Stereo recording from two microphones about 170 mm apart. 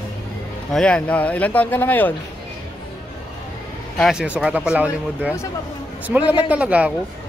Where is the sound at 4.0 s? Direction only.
5° right (ahead or behind).